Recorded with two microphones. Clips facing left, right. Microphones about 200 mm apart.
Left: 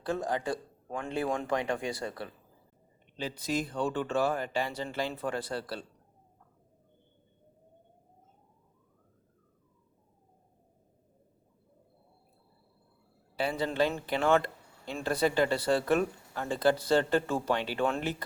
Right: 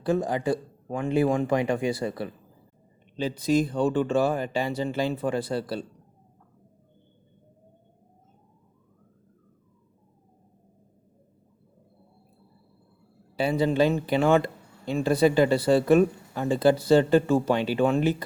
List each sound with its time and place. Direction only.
0.0 s speech: 10° right (ahead or behind)
13.3 s speech: 15° right (ahead or behind)